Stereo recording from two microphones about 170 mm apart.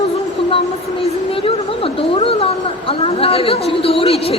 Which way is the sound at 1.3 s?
35° left (ahead or behind).